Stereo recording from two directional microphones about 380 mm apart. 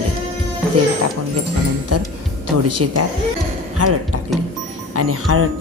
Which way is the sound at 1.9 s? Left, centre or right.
Right.